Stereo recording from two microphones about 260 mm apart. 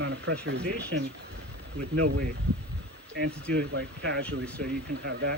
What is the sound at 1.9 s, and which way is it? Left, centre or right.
Speech, right.